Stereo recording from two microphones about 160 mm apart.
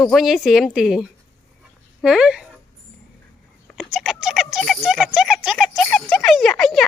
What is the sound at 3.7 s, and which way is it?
Speech, centre (ahead or behind).